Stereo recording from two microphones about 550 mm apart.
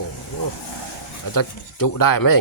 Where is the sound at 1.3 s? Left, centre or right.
Left.